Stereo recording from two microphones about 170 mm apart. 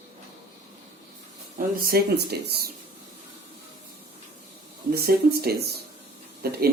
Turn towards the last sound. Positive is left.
turn(degrees=-65)  # may be behind; listen again after turning